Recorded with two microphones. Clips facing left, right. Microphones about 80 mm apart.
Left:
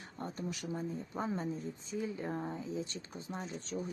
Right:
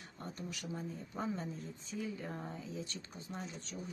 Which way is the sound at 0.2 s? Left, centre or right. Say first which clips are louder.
Left 5 dB; left.